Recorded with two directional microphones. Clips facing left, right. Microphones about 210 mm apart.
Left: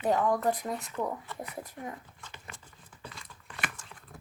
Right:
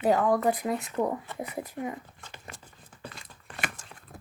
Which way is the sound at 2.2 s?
40° right (ahead or behind).